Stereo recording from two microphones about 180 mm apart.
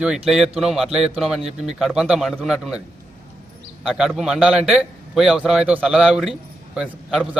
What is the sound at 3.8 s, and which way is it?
A man's voice, centre (ahead or behind).